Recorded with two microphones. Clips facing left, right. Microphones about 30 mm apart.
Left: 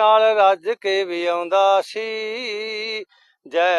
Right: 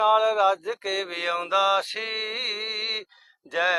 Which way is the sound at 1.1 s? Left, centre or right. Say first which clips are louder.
Left 6 dB; centre.